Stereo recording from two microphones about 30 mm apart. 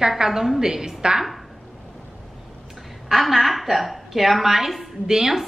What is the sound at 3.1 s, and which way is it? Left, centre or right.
A woman's voice, centre.